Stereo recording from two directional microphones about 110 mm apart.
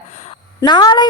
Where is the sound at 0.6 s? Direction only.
40° left (ahead or behind).